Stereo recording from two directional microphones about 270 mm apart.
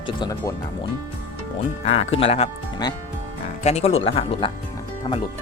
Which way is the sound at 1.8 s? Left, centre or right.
Left.